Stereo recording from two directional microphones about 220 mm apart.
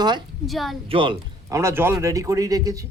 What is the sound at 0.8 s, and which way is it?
Speech, 25° right (ahead or behind).